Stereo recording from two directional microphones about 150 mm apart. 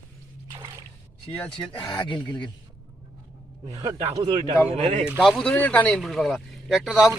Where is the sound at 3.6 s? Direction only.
35° right (ahead or behind).